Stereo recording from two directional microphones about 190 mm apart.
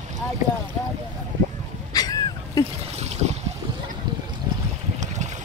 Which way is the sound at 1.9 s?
20° left (ahead or behind).